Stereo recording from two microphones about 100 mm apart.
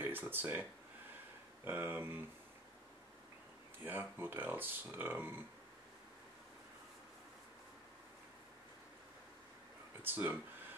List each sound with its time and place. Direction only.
0.0 s speech: 20° right (ahead or behind)
3.8 s speech: 20° right (ahead or behind)
10.0 s speech: 20° right (ahead or behind)